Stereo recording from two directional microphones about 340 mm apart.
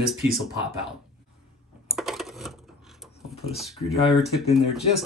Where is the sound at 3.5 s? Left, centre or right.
Centre.